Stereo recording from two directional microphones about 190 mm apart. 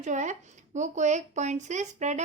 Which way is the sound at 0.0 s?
40° right (ahead or behind).